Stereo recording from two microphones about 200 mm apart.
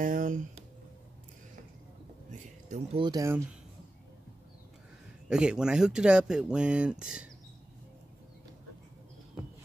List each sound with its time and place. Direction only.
0.0 s speech: 40° right (ahead or behind)
2.3 s a sound: 35° right (ahead or behind)
3.0 s speech: 20° right (ahead or behind)
5.3 s speech: 5° right (ahead or behind)